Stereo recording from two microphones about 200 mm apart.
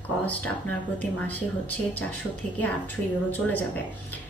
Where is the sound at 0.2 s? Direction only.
5° left (ahead or behind).